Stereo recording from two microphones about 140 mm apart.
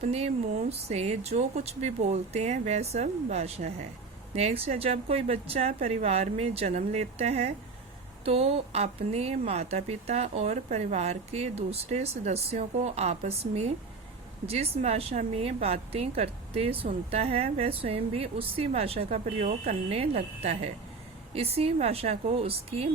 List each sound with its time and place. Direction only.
0.0 s a woman's voice: 50° right (ahead or behind)